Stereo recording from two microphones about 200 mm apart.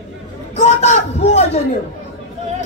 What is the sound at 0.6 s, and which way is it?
A man's voice, 35° left (ahead or behind).